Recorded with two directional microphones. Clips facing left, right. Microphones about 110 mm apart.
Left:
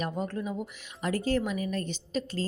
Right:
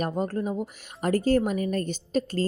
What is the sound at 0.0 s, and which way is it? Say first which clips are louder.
Speech: right 5 dB; 40° right (ahead or behind).